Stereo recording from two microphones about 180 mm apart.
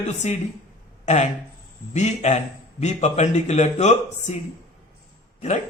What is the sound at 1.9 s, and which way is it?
A man's voice, 40° left (ahead or behind).